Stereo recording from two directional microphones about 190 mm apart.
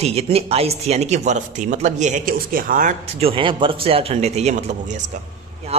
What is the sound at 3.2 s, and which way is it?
Speech, 30° right (ahead or behind).